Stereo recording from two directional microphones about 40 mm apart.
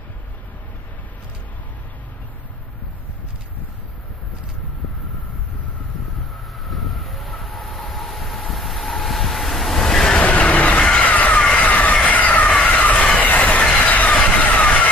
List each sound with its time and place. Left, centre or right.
6.7 s train: centre
10.2 s vehicle: left
11.6 s a sound: left
12.6 s train: left